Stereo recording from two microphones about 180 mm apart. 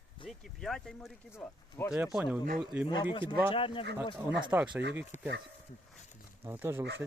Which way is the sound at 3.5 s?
30° left (ahead or behind).